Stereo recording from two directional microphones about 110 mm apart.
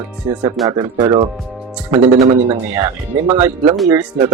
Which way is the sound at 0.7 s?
40° right (ahead or behind).